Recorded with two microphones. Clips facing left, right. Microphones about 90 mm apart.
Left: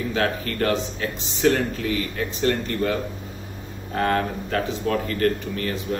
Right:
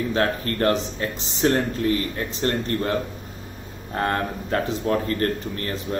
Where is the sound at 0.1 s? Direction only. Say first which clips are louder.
Right 1 dB; 35° right (ahead or behind).